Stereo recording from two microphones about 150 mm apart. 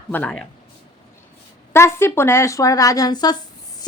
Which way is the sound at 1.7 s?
15° left (ahead or behind).